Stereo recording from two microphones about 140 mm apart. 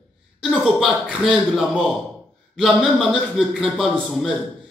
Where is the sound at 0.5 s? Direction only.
5° right (ahead or behind).